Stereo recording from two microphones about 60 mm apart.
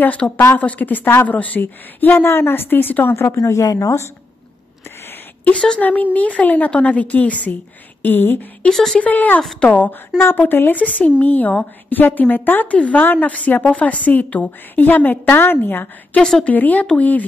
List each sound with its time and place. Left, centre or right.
0.2 s a woman's voice: left
3.3 s speech: left
4.8 s a sound: left
5.5 s a woman's voice: left
8.6 s a woman's voice: centre
8.9 s a woman's voice: left
16.2 s a woman's voice: centre
16.4 s a woman's voice: left